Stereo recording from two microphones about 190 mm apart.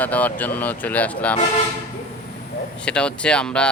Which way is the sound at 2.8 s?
5° left (ahead or behind).